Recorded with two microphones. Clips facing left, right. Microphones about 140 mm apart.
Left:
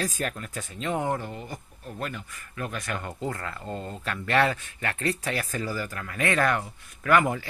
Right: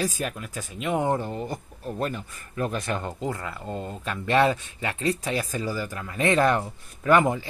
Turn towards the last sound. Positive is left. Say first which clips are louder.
# right 2 dB
turn(degrees=-20)  # may be behind; listen again after turning